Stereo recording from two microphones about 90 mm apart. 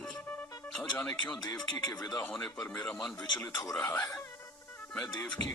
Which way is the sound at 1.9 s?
45° left (ahead or behind).